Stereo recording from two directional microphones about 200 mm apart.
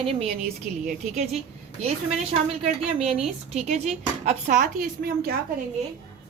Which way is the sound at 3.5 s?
35° right (ahead or behind).